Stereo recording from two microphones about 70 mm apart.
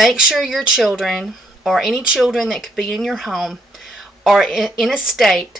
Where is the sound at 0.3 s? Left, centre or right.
Centre.